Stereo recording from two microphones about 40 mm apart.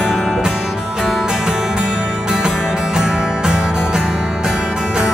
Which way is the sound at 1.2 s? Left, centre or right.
Centre.